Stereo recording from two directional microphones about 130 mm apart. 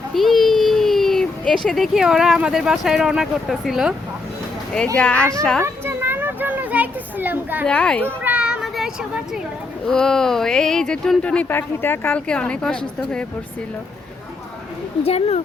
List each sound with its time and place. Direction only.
0.1 s a child's voice: centre (ahead or behind)
4.9 s speech: 10° left (ahead or behind)
5.6 s children playing: 20° right (ahead or behind)
7.6 s speech: 5° left (ahead or behind)
8.2 s children playing: 10° right (ahead or behind)
9.8 s speech: 5° left (ahead or behind)
15.0 s speech: 50° left (ahead or behind)